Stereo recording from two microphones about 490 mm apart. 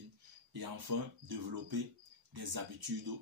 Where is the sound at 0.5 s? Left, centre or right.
Right.